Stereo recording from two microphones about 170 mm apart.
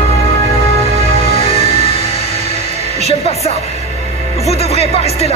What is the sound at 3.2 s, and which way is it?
Music, 40° left (ahead or behind).